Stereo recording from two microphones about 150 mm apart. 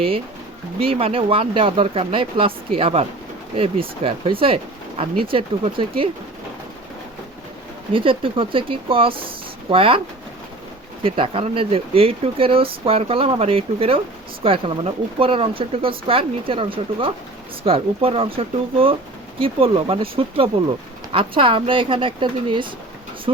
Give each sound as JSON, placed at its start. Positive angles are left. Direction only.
{"t": 0.8, "sound": "speech", "side_deg": -40}
{"t": 7.9, "sound": "speech", "side_deg": -35}
{"t": 11.0, "sound": "speech", "side_deg": -40}